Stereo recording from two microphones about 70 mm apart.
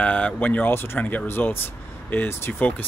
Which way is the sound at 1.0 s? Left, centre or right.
Left.